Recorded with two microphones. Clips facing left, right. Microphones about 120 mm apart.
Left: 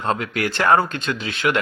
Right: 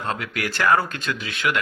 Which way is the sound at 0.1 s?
25° left (ahead or behind).